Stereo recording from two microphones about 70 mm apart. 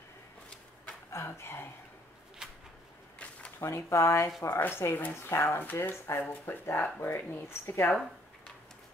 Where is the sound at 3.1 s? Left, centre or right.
Centre.